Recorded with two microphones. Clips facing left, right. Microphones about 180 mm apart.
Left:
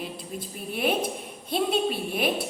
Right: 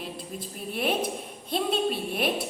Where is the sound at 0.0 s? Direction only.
Centre (ahead or behind).